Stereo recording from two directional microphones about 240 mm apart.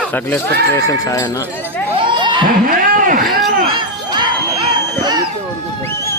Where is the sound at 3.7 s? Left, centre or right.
Centre.